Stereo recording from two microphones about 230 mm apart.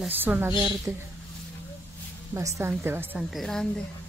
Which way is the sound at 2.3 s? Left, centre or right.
Centre.